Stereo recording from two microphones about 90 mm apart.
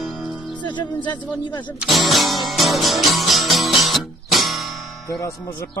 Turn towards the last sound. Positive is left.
turn(degrees=40)  # may be behind; listen again after turning